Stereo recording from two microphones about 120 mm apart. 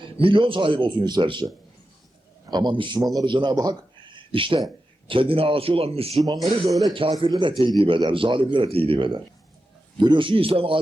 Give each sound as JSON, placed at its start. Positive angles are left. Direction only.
{"t": 0.0, "sound": "a man's voice", "side_deg": -45}
{"t": 4.3, "sound": "a man's voice", "side_deg": -45}
{"t": 6.4, "sound": "speech", "side_deg": 0}
{"t": 7.1, "sound": "a man's voice", "side_deg": -40}